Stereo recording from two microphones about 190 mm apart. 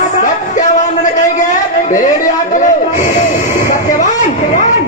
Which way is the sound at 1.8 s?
40° left (ahead or behind).